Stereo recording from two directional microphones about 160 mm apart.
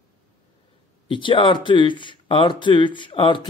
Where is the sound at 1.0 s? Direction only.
30° left (ahead or behind).